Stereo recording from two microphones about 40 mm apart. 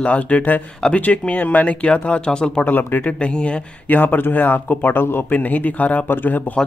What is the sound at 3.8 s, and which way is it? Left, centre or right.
Speech, left.